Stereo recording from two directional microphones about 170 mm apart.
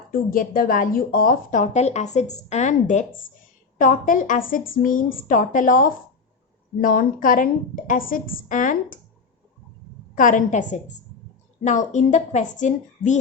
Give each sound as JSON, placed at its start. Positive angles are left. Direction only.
{"t": 0.1, "sound": "a woman's voice", "side_deg": 60}
{"t": 10.2, "sound": "a woman's voice", "side_deg": 50}